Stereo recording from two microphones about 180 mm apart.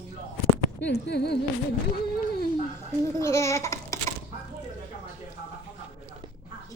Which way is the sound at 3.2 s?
15° left (ahead or behind).